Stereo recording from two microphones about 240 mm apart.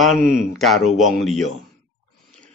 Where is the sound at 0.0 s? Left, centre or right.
Centre.